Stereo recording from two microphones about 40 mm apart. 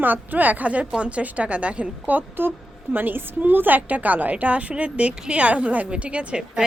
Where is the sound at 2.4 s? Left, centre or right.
Right.